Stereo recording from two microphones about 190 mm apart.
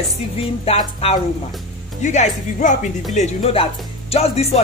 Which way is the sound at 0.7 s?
30° left (ahead or behind).